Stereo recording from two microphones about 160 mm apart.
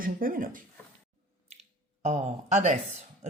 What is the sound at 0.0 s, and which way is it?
Speech, 60° right (ahead or behind).